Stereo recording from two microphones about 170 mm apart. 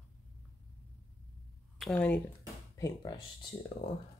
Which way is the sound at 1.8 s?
5° left (ahead or behind).